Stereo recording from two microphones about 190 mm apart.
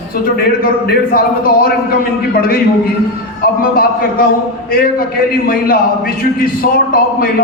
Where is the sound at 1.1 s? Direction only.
50° left (ahead or behind).